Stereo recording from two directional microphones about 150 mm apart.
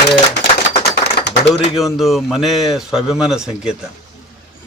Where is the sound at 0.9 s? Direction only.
90° left.